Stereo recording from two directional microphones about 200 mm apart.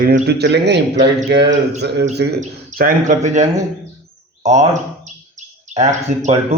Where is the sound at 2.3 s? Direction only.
40° right (ahead or behind).